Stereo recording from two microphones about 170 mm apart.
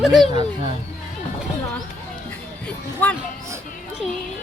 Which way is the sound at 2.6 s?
10° left (ahead or behind).